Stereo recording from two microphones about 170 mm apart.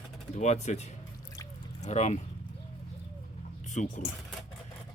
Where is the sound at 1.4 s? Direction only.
20° left (ahead or behind).